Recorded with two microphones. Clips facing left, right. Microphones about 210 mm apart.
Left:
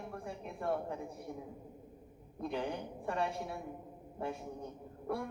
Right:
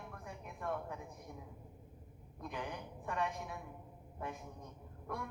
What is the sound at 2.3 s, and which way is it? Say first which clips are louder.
A woman's voice: left 7 dB; 30° left (ahead or behind).